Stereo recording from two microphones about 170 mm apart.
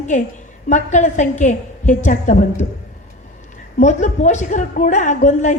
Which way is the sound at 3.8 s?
45° left (ahead or behind).